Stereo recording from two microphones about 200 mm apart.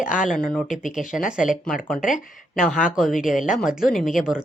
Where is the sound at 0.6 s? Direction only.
40° left (ahead or behind).